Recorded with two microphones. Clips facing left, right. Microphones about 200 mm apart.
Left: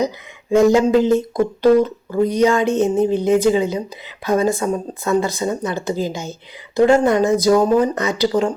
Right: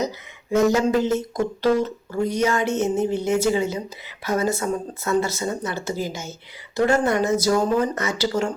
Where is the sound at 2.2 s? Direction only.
15° left (ahead or behind).